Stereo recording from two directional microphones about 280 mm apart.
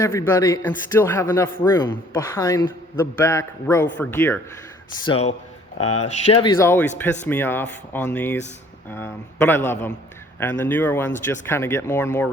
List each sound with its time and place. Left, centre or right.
0.0 s speech: centre
5.0 s a man's voice: left
5.8 s speech: left
6.3 s speech: centre